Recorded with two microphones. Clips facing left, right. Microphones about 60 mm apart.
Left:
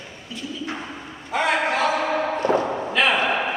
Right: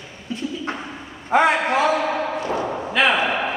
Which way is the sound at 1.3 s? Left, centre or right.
Right.